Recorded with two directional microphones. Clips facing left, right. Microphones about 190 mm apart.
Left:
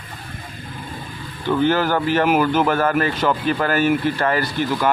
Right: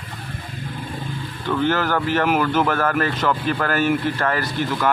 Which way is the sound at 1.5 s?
Centre (ahead or behind).